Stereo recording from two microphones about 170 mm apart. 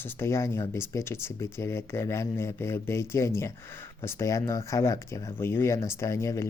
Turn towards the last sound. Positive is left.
turn(degrees=15)  # may be behind; listen again after turning